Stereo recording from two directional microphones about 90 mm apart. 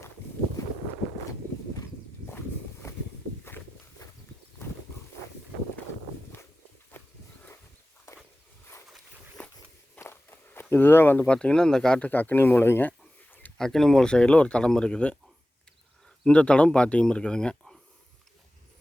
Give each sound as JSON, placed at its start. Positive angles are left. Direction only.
{"t": 0.6, "sound": "boat", "side_deg": 40}
{"t": 2.8, "sound": "walk", "side_deg": 30}
{"t": 6.9, "sound": "walk", "side_deg": 25}
{"t": 9.4, "sound": "walk", "side_deg": 15}
{"t": 10.0, "sound": "walk", "side_deg": 25}
{"t": 11.3, "sound": "speech", "side_deg": 10}
{"t": 13.6, "sound": "speech", "side_deg": 5}
{"t": 16.2, "sound": "speech", "side_deg": 10}